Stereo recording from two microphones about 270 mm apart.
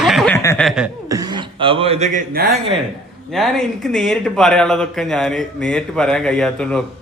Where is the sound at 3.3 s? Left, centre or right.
Centre.